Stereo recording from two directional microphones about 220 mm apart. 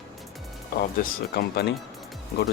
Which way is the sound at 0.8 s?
45° left (ahead or behind).